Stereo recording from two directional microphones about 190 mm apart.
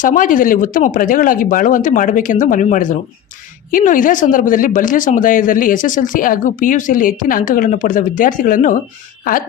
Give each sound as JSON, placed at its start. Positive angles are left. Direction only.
{"t": 0.0, "sound": "speech", "side_deg": 45}